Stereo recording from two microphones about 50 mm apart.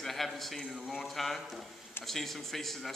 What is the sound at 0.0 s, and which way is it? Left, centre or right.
A man's voice, centre.